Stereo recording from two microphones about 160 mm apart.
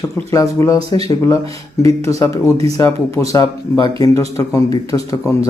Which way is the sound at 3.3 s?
25° left (ahead or behind).